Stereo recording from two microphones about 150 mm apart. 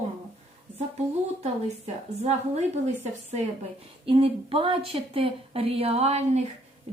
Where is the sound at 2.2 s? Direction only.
45° right (ahead or behind).